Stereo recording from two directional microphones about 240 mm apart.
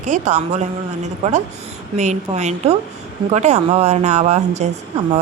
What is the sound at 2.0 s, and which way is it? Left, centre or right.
Speech, right.